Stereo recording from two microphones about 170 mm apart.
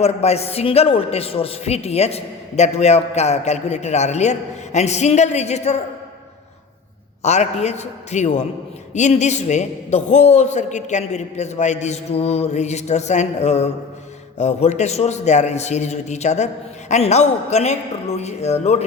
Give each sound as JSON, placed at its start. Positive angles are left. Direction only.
{"t": 0.0, "sound": "a man's voice", "side_deg": 40}
{"t": 7.2, "sound": "a man's voice", "side_deg": 40}